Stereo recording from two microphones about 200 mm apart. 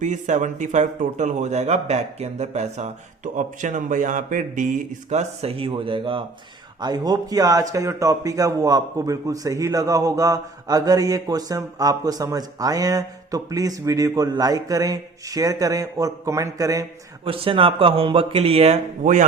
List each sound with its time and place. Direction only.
0.0 s a man's voice: 40° right (ahead or behind); by 16.8 s 15° right (ahead or behind)
17.2 s speech: 25° right (ahead or behind)